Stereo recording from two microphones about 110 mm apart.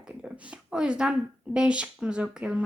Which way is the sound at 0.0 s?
5° right (ahead or behind).